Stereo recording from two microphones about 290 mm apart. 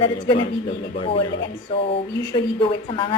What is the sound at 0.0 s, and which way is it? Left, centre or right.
A woman's voice, centre.